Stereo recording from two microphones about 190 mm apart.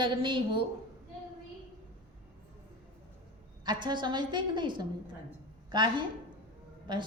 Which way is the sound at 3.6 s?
25° right (ahead or behind).